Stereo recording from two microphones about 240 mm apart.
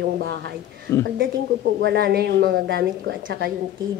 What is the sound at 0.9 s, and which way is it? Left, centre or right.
Speech, centre.